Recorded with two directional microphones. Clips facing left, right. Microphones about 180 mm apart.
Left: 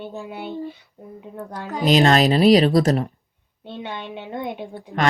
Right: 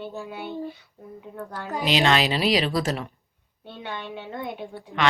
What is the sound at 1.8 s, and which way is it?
A woman's voice, 40° left (ahead or behind).